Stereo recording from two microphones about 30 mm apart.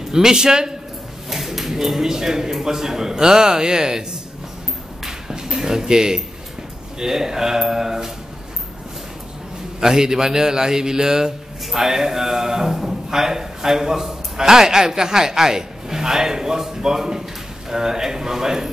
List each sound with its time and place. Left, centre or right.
0.1 s a man's voice: right
1.3 s a man's voice: centre; by 4.0 s right
5.3 s a sound: right
7.0 s a man's voice: centre
9.8 s a man's voice: right